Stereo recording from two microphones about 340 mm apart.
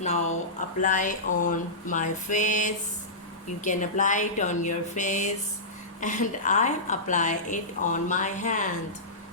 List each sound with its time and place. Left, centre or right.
0.0 s a woman's voice: centre